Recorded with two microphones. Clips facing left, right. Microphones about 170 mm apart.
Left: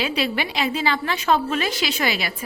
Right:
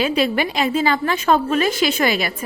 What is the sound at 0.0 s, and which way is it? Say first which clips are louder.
A woman's voice: right 5 dB; 45° right (ahead or behind).